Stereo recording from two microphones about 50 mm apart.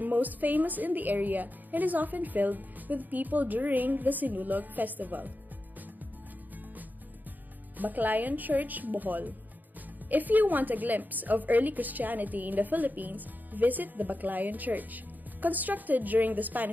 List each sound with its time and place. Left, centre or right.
0.0 s a woman's voice: right
7.7 s a woman's voice: right